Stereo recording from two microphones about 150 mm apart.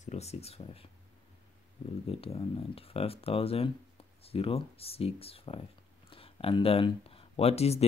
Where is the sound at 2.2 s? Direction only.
40° left (ahead or behind).